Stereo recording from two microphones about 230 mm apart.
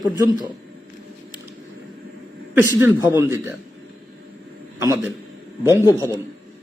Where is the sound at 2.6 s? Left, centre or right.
Centre.